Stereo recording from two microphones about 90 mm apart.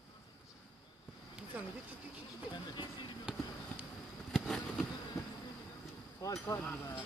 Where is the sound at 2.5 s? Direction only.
60° left (ahead or behind).